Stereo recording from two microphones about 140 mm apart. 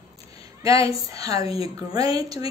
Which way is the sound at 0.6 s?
25° right (ahead or behind).